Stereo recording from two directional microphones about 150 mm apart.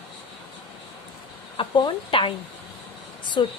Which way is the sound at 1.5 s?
35° left (ahead or behind).